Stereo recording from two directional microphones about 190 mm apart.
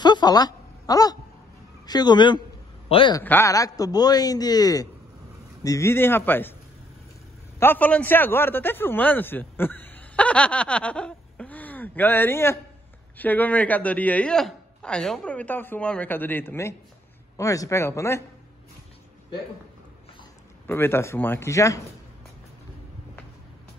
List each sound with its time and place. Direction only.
0.0 s a sound: 20° left (ahead or behind)
1.9 s a man's voice: 20° left (ahead or behind)
3.2 s a man's voice: 15° left (ahead or behind)
7.5 s a man's voice: 10° left (ahead or behind)
20.6 s speech: 10° left (ahead or behind)